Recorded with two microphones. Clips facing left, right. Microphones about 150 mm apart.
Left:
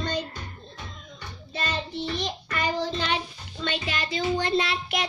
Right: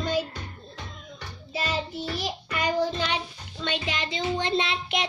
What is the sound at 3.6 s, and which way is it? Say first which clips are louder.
A child's voice: even; 15° right (ahead or behind).